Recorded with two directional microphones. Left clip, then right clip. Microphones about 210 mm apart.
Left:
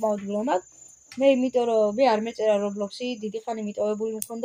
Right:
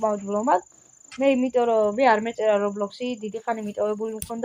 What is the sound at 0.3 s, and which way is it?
Speech, 10° right (ahead or behind).